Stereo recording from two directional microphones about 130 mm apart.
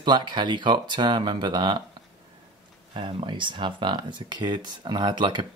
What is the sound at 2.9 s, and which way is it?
Speech, 40° right (ahead or behind).